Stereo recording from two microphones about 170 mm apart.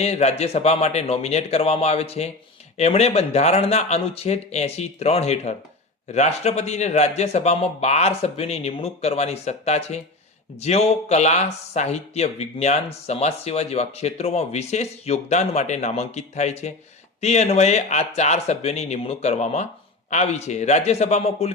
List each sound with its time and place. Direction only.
0.0 s speech: 40° left (ahead or behind)